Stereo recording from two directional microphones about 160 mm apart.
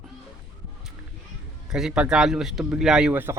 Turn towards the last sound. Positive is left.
turn(degrees=-10)  # may be behind; listen again after turning